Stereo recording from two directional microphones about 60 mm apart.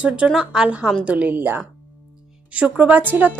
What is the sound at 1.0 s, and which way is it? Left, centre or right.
Speech, right.